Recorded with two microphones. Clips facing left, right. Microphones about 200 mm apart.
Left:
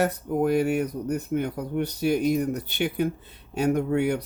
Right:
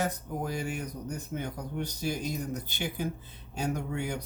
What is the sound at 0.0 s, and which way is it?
Speech, 60° left (ahead or behind).